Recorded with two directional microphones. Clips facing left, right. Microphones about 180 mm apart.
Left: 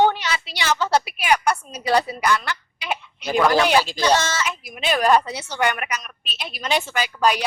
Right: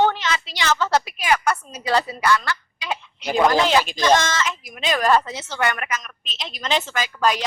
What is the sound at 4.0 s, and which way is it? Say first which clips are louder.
A woman's voice: right 1 dB; 10° left (ahead or behind).